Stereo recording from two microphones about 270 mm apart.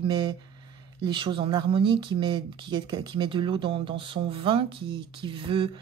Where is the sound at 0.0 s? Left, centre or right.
Centre.